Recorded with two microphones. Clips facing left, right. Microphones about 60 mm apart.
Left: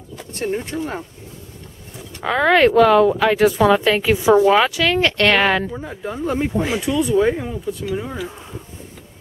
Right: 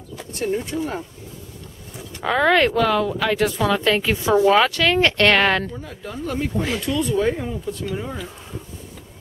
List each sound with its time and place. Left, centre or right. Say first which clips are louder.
0.3 s speech: even; left
2.2 s speech: left 3 dB; centre
5.7 s speech: left 5 dB; left; by 8.3 s centre